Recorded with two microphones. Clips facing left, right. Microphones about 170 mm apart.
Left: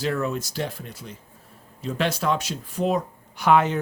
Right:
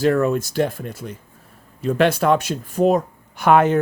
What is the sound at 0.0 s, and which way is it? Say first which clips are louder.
Speech: right 8 dB; 50° right (ahead or behind).